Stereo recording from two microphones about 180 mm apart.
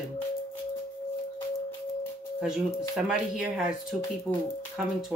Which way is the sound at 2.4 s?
5° right (ahead or behind).